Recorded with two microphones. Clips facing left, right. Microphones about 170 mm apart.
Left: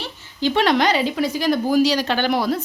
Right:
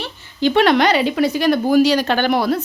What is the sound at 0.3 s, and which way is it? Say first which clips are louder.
A woman's voice: right 4 dB; 60° right (ahead or behind).